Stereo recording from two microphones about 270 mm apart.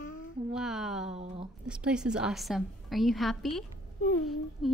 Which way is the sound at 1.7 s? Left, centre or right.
Centre.